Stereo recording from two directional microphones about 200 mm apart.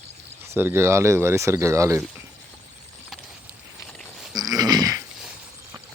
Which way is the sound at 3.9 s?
Centre (ahead or behind).